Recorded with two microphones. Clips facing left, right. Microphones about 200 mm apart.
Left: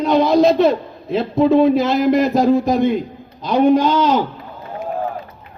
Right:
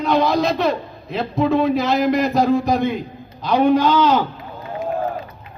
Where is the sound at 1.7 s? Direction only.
50° left (ahead or behind).